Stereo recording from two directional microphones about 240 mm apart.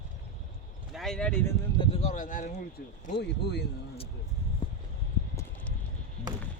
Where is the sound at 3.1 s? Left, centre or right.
Left.